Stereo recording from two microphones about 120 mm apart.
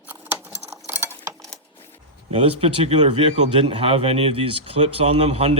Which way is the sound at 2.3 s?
55° right (ahead or behind).